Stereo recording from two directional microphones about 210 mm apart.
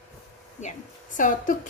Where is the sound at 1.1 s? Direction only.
40° left (ahead or behind).